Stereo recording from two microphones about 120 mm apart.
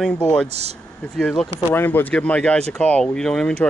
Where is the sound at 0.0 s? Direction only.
10° left (ahead or behind).